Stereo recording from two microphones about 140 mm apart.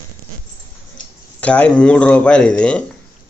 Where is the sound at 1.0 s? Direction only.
70° left (ahead or behind).